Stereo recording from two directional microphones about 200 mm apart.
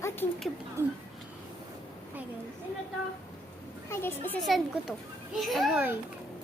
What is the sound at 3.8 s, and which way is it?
Speech, 10° left (ahead or behind).